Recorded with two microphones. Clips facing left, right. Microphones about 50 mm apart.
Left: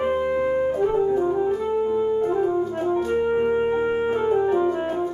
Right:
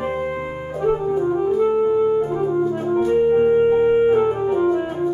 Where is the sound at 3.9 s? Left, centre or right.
Centre.